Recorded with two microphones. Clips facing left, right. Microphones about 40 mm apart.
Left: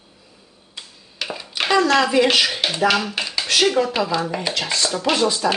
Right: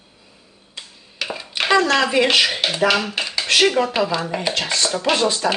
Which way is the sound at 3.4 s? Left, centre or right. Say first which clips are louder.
Right 2 dB; right.